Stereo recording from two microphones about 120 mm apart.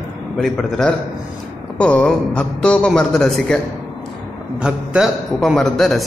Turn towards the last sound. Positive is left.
turn(degrees=0)  # may be behind; listen again after turning